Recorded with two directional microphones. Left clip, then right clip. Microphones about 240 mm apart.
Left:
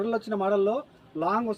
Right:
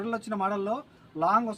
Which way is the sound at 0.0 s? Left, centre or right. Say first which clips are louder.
Left 3 dB; right.